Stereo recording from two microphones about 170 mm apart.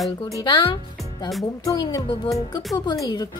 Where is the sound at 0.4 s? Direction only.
25° left (ahead or behind).